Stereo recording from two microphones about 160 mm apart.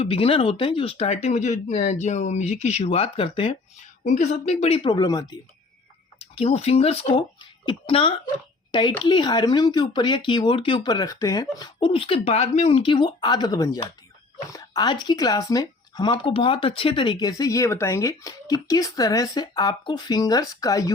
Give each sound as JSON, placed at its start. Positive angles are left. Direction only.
{"t": 0.0, "sound": "speech", "side_deg": 35}
{"t": 4.0, "sound": "speech", "side_deg": 50}
{"t": 6.1, "sound": "speech", "side_deg": 40}